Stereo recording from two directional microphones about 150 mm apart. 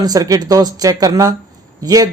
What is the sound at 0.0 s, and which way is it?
Speech, 25° right (ahead or behind).